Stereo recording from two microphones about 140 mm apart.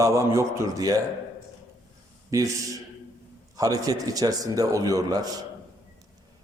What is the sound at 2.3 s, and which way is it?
Speech, 25° right (ahead or behind).